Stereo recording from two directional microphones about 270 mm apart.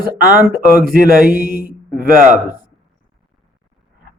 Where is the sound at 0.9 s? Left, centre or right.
Right.